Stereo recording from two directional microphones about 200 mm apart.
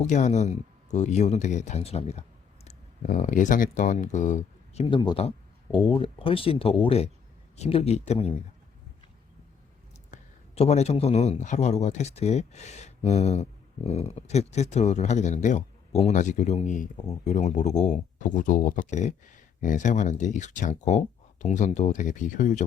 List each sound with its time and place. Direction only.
0.0 s a man's voice: 35° left (ahead or behind)
10.1 s a man's voice: 35° left (ahead or behind)